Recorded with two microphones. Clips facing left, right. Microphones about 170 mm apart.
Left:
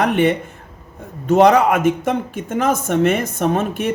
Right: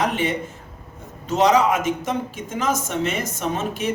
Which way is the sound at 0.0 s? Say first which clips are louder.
Left 6 dB; 60° left (ahead or behind).